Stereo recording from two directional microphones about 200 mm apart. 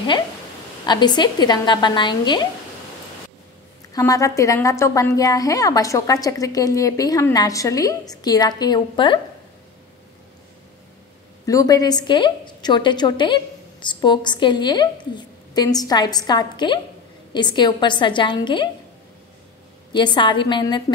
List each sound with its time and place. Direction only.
0.8 s a woman's voice: 20° left (ahead or behind)
3.9 s a woman's voice: 15° left (ahead or behind)
11.4 s a woman's voice: 15° left (ahead or behind)
19.9 s a woman's voice: 20° left (ahead or behind)